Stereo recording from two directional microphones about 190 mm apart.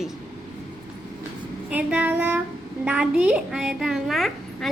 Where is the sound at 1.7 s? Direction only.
10° right (ahead or behind).